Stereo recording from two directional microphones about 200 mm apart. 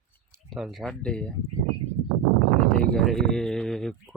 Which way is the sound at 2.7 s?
5° left (ahead or behind).